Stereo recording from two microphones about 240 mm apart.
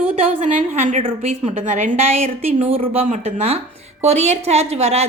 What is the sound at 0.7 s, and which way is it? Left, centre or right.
A woman's voice, right.